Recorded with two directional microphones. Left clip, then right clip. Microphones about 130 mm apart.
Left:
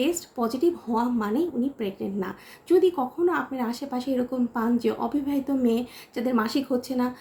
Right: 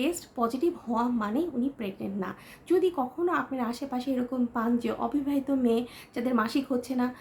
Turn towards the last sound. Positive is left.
turn(degrees=-20)  # may be behind; listen again after turning